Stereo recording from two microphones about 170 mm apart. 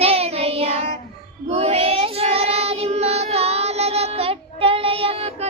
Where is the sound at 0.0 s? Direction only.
35° right (ahead or behind).